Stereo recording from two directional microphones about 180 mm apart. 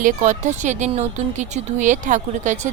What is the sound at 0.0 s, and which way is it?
Speech, 40° right (ahead or behind).